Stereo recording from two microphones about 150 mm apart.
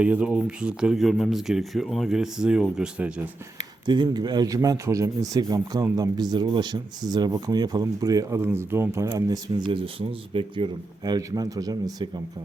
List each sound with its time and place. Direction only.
0.0 s speech: 5° right (ahead or behind)
3.8 s speech: 30° right (ahead or behind)